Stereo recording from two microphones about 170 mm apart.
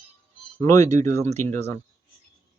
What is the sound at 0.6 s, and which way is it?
Speech, 20° left (ahead or behind).